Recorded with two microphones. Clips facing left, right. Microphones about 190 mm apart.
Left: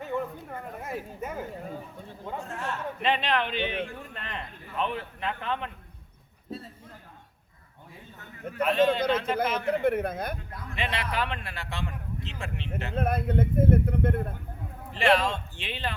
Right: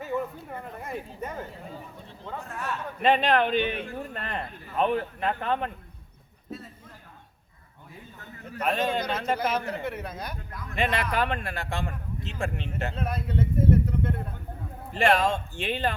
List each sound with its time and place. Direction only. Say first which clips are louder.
0.0 s a sound: right 1 dB; 5° right (ahead or behind)
0.8 s speech: even; 5° left (ahead or behind)
2.2 s a man's voice: even; 20° left (ahead or behind)
3.0 s a man's voice: right 6 dB; 45° right (ahead or behind)
8.6 s a man's voice: left 4 dB; 45° right (ahead or behind)
9.1 s speech: even; 55° left (ahead or behind)
10.8 s a man's voice: right 4 dB; 50° right (ahead or behind)
12.9 s speech: left 4 dB; 50° left (ahead or behind)
14.9 s a man's voice: right 1 dB; 45° right (ahead or behind)